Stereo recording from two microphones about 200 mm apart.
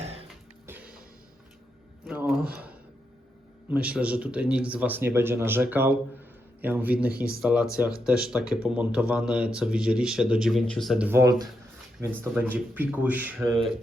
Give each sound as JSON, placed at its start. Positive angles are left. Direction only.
{"t": 0.0, "sound": "music", "side_deg": -30}
{"t": 0.7, "sound": "music", "side_deg": -5}
{"t": 2.0, "sound": "a sound", "side_deg": -5}
{"t": 3.7, "sound": "speech", "side_deg": -5}